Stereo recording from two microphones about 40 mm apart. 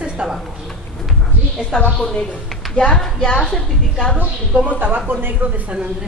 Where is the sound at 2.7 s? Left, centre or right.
Left.